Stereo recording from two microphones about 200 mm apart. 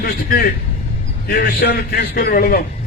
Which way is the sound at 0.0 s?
45° left (ahead or behind).